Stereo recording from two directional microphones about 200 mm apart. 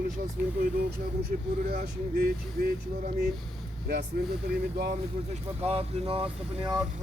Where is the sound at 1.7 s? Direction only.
45° right (ahead or behind).